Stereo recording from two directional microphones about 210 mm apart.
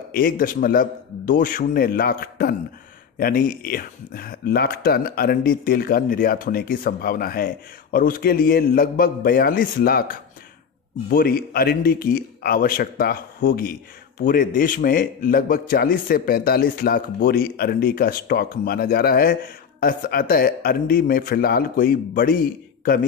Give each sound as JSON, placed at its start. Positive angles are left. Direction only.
{"t": 0.1, "sound": "speech", "side_deg": 45}